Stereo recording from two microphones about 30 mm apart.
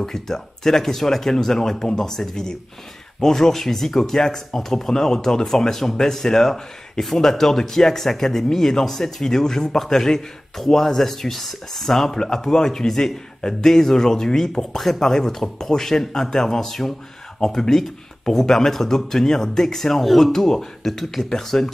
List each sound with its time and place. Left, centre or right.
0.0 s speech: centre
20.0 s speech: centre
20.3 s speech: centre
20.8 s speech: centre